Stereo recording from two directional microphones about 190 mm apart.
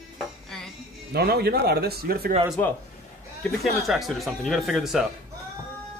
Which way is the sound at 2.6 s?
10° left (ahead or behind).